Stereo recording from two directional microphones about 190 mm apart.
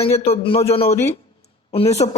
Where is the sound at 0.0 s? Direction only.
30° left (ahead or behind).